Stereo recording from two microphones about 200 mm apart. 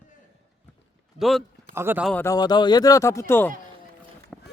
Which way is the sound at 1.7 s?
10° right (ahead or behind).